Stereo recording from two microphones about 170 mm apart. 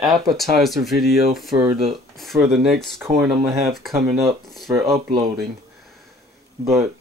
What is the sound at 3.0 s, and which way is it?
Speech, 15° right (ahead or behind).